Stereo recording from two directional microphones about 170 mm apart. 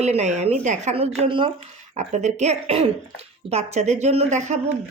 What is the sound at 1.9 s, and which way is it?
A woman's voice, 45° right (ahead or behind).